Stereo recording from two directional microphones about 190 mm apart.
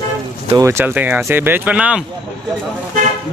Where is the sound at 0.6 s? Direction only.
15° right (ahead or behind).